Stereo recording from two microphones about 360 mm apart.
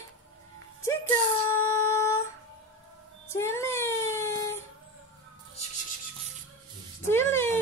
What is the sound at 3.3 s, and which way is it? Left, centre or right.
Child singing, centre.